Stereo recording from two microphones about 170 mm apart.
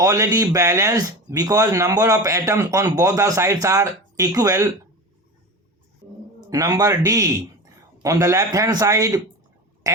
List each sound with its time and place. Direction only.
0.0 s speech: 20° right (ahead or behind)
6.5 s speech: 20° right (ahead or behind)
9.8 s a sound: 20° right (ahead or behind)